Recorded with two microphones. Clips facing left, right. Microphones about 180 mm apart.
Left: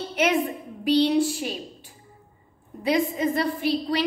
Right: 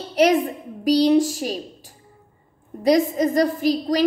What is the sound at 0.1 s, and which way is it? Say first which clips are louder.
A woman's voice: right 6 dB; 35° right (ahead or behind).